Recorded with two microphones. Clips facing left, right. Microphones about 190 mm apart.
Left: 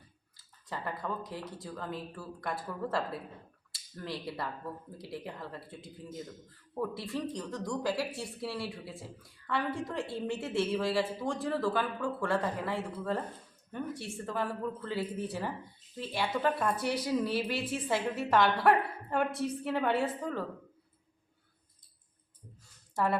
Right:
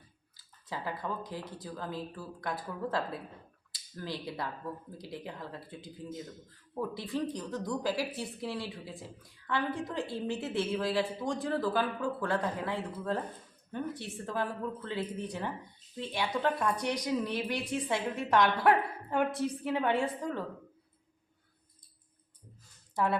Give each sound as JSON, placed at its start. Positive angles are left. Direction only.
{"t": 0.3, "sound": "a woman's voice", "side_deg": 0}